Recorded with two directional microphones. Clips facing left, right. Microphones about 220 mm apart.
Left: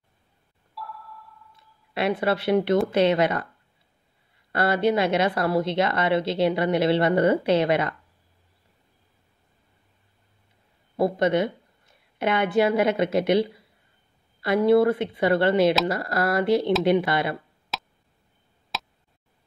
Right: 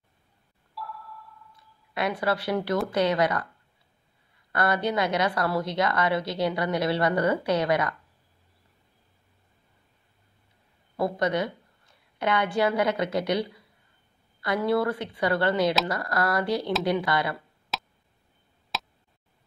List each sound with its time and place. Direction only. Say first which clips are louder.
0.7 s sonar: even; centre (ahead or behind)
2.0 s a woman's voice: left 3 dB; 25° left (ahead or behind)
4.5 s a woman's voice: left 4 dB; 25° left (ahead or behind)
11.0 s a woman's voice: left 4 dB; 25° left (ahead or behind)
17.7 s a sound: even; centre (ahead or behind)
18.7 s tick: even; centre (ahead or behind)